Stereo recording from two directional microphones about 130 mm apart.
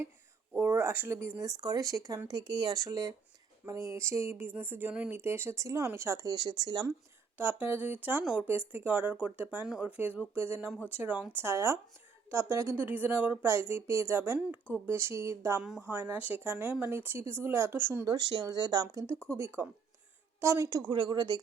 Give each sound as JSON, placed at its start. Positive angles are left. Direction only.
{"t": 0.5, "sound": "speech", "side_deg": -15}
{"t": 7.3, "sound": "speech", "side_deg": -15}
{"t": 18.1, "sound": "speech", "side_deg": -30}
{"t": 19.1, "sound": "speech", "side_deg": 10}
{"t": 19.4, "sound": "speech", "side_deg": -20}